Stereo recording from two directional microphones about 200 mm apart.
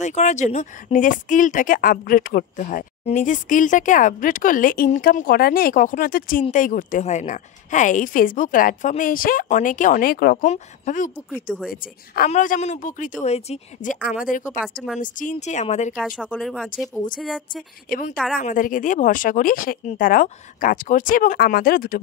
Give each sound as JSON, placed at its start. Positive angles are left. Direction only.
{"t": 0.0, "sound": "speech", "side_deg": 35}
{"t": 10.4, "sound": "speech", "side_deg": 40}
{"t": 14.6, "sound": "speech", "side_deg": 0}
{"t": 15.0, "sound": "speech", "side_deg": 40}
{"t": 16.2, "sound": "speech", "side_deg": 5}
{"t": 17.8, "sound": "speech", "side_deg": 45}